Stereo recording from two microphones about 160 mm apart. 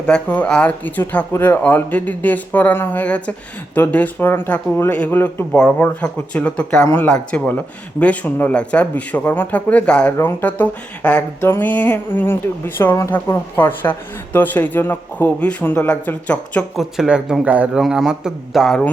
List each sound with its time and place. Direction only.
0.0 s speech: 5° left (ahead or behind)
17.0 s a man's voice: 5° right (ahead or behind)